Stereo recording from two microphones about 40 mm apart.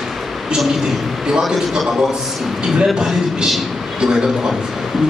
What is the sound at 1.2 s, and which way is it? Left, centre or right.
A man's voice, centre.